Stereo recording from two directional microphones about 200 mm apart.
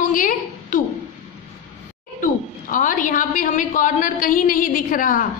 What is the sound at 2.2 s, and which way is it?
A woman's voice, 40° left (ahead or behind).